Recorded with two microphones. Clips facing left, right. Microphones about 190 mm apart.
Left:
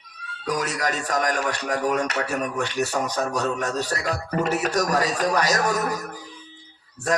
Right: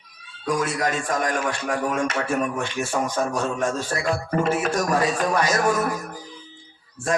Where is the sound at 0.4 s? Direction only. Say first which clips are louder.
Right 2 dB; 40° left (ahead or behind).